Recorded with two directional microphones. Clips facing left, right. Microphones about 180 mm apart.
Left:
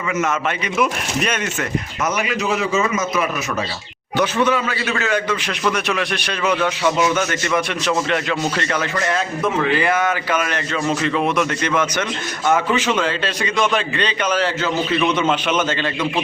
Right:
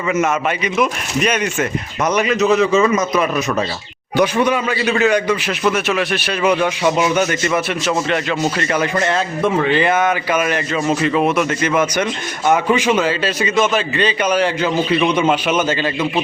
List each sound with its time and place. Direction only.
0.1 s a man's voice: 15° right (ahead or behind)
2.0 s a man's voice: 40° right (ahead or behind)
4.2 s a man's voice: 15° right (ahead or behind)
9.0 s a man's voice: 30° right (ahead or behind)
10.3 s a man's voice: 10° right (ahead or behind)